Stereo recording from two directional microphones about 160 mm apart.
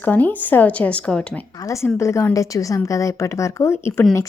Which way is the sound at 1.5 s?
20° left (ahead or behind).